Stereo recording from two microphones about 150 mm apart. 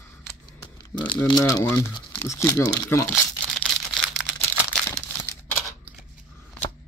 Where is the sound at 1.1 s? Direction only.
30° left (ahead or behind).